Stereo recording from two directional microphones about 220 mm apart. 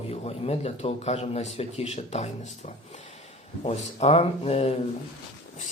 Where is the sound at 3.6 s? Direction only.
30° left (ahead or behind).